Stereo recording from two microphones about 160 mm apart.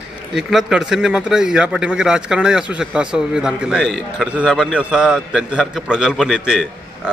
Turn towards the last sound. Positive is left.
turn(degrees=-5)  # may be behind; listen again after turning